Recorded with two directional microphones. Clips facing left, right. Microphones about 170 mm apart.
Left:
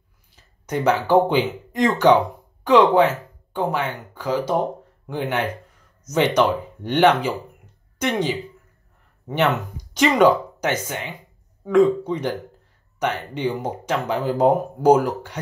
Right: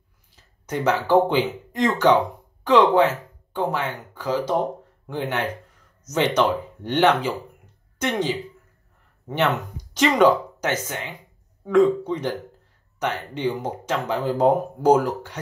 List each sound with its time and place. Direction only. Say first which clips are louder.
0.7 s speech: left 2 dB; 15° left (ahead or behind)
9.9 s speech: left 1 dB; 15° left (ahead or behind)